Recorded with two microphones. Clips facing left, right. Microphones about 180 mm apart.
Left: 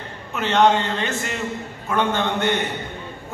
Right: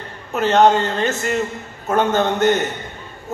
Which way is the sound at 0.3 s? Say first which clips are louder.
Right 4 dB; 40° right (ahead or behind).